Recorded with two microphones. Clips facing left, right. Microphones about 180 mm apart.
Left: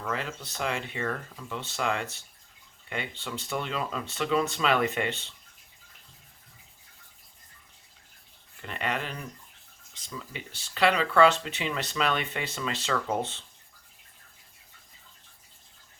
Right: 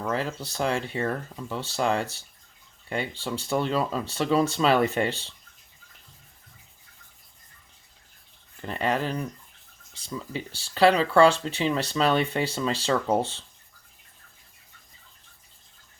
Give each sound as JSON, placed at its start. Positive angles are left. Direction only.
{"t": 0.1, "sound": "speech", "side_deg": -35}
{"t": 8.6, "sound": "speech", "side_deg": -35}